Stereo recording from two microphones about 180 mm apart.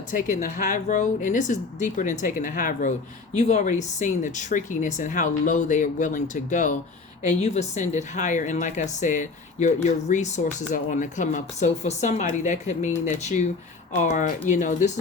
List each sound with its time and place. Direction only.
0.1 s speech: 45° left (ahead or behind)